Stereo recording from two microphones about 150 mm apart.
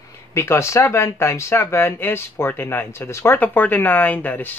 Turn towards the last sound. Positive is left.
turn(degrees=10)  # may be behind; listen again after turning